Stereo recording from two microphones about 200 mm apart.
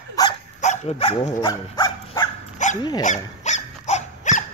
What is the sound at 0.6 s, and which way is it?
Dog, 35° left (ahead or behind).